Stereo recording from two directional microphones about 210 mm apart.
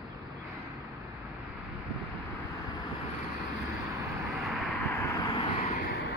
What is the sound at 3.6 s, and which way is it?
Vehicle, 15° right (ahead or behind).